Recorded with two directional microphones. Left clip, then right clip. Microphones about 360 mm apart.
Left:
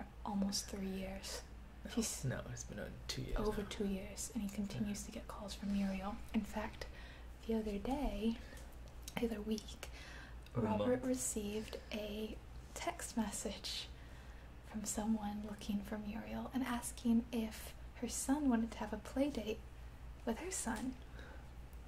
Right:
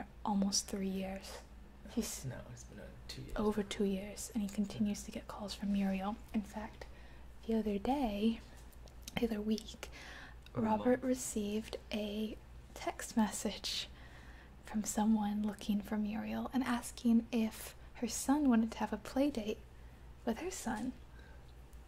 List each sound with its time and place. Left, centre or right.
0.2 s speech: right
2.5 s speech: left
3.3 s a woman's voice: right
6.5 s a woman's voice: centre
7.5 s a woman's voice: right